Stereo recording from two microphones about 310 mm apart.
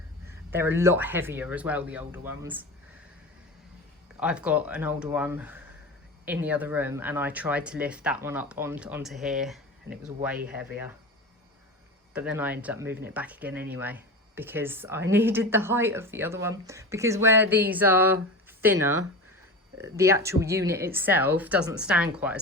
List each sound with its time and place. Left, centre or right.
0.3 s speech: centre
4.2 s speech: centre
12.4 s speech: centre
19.8 s speech: centre